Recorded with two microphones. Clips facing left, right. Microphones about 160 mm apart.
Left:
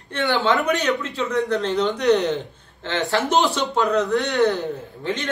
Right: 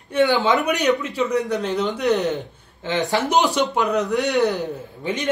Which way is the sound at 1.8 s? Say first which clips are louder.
Left 3 dB; 5° right (ahead or behind).